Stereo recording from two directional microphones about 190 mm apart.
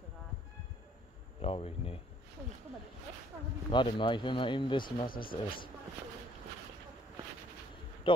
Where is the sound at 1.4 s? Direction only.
30° left (ahead or behind).